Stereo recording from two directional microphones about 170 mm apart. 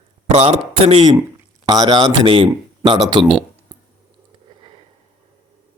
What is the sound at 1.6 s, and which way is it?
Speech, 25° right (ahead or behind).